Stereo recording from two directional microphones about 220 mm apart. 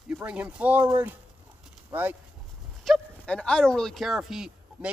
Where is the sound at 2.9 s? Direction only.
5° left (ahead or behind).